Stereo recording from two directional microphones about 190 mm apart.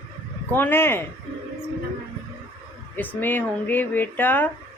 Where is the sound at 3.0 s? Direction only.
10° left (ahead or behind).